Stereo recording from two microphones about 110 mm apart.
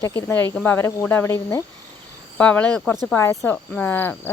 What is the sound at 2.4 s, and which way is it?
Speech, 10° left (ahead or behind).